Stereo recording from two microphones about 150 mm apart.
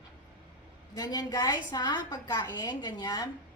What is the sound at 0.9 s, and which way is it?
A woman's voice, 25° left (ahead or behind).